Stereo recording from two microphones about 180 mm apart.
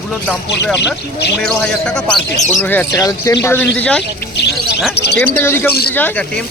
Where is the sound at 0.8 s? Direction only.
70° left (ahead or behind).